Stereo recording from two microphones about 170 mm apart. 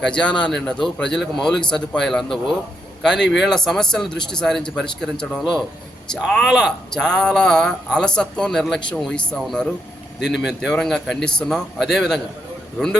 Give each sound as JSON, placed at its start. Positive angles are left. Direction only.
{"t": 0.0, "sound": "speech", "side_deg": 5}
{"t": 10.2, "sound": "speech", "side_deg": 90}
{"t": 10.4, "sound": "speech", "side_deg": 0}